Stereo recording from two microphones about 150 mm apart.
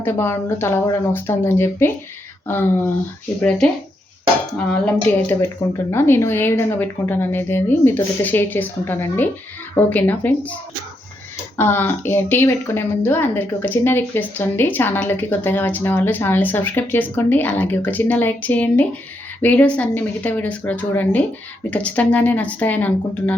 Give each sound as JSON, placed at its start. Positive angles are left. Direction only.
{"t": 0.0, "sound": "speech", "side_deg": 15}
{"t": 5.0, "sound": "speech", "side_deg": 15}
{"t": 11.5, "sound": "speech", "side_deg": 15}